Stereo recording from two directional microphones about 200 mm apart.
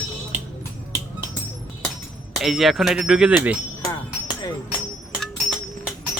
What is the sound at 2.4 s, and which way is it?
Speech, centre (ahead or behind).